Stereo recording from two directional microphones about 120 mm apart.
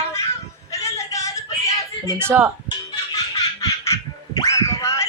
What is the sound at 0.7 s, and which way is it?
Music, 25° left (ahead or behind).